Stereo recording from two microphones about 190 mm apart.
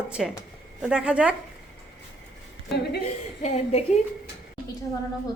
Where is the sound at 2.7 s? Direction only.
60° left (ahead or behind).